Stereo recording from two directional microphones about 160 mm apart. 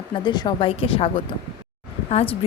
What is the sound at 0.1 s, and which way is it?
A woman's voice, 30° left (ahead or behind).